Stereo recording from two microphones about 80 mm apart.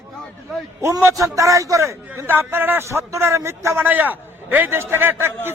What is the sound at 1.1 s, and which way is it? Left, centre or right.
A man's voice, right.